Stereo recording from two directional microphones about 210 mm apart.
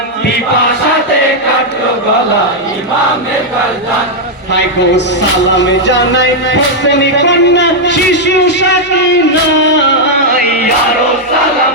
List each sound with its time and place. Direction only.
5.5 s speech: 55° left (ahead or behind)